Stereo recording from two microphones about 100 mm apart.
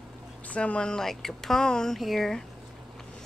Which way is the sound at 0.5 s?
10° left (ahead or behind).